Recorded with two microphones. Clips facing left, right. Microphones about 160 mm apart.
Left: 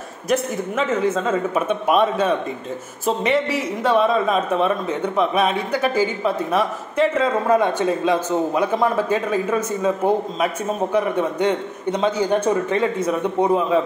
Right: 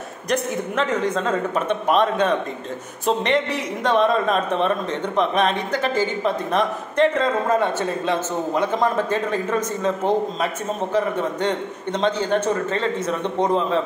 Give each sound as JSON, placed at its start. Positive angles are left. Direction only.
{"t": 0.3, "sound": "a man's voice", "side_deg": 5}